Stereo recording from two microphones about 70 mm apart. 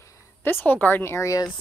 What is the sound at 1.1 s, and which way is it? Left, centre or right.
Speech, left.